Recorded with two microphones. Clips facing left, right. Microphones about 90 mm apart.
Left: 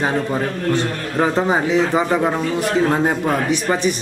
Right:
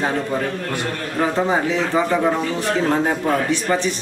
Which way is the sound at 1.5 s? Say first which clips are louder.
Left 2 dB; 15° left (ahead or behind).